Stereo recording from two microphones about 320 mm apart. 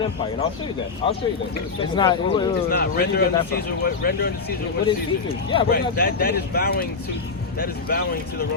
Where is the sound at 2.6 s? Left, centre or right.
Left.